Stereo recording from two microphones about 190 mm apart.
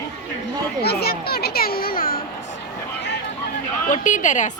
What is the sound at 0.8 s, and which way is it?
A child's voice, 55° left (ahead or behind).